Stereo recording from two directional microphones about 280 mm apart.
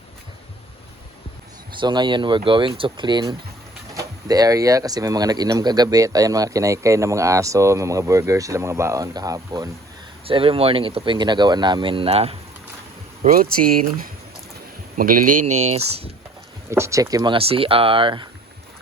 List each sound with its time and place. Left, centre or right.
1.8 s speech: centre
16.6 s speech: centre